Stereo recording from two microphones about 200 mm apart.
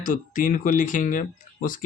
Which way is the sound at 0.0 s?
40° left (ahead or behind).